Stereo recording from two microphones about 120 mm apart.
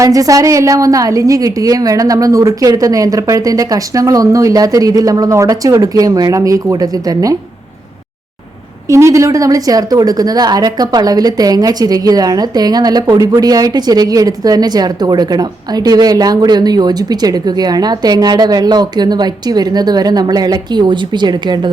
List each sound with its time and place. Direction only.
0.0 s a woman's voice: 30° right (ahead or behind)
8.9 s a woman's voice: 25° right (ahead or behind)